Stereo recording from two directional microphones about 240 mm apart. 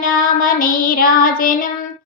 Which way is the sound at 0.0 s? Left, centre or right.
Left.